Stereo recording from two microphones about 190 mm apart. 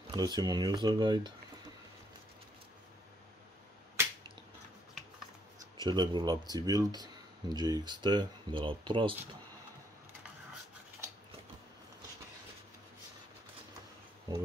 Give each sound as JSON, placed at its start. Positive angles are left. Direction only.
{"t": 0.1, "sound": "speech", "side_deg": -20}
{"t": 5.8, "sound": "speech", "side_deg": -25}